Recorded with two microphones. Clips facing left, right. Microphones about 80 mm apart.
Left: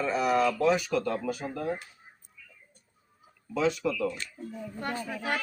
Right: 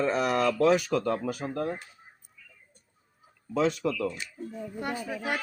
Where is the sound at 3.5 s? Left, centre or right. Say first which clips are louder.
Right 1 dB; right.